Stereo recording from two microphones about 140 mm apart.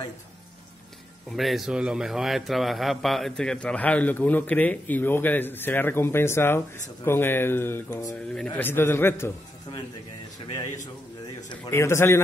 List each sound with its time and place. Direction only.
1.3 s a man's voice: centre (ahead or behind); by 9.3 s 15° left (ahead or behind)
11.7 s a man's voice: 20° left (ahead or behind)